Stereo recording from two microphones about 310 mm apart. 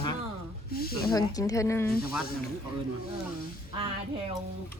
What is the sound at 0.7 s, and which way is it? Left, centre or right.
Speech, left.